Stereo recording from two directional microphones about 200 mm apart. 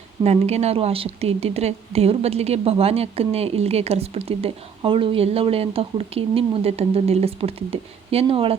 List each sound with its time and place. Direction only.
0.2 s a woman's voice: 30° right (ahead or behind)